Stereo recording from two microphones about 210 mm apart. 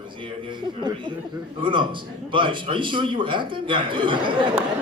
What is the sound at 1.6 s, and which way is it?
A man's voice, 25° right (ahead or behind).